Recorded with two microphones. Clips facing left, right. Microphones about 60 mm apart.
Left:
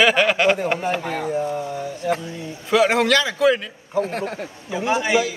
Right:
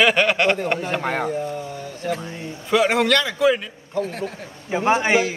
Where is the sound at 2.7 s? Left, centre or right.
Centre.